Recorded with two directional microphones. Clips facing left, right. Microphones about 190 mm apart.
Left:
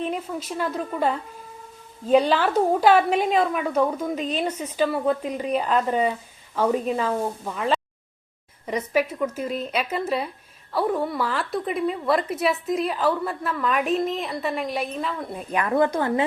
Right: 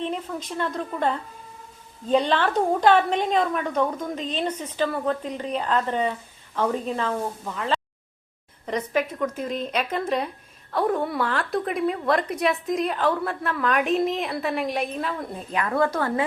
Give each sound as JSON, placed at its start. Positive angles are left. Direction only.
{"t": 0.0, "sound": "a woman's voice", "side_deg": 10}
{"t": 15.5, "sound": "a woman's voice", "side_deg": 20}